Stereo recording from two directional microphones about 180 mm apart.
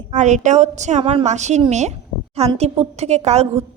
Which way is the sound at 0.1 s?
40° right (ahead or behind).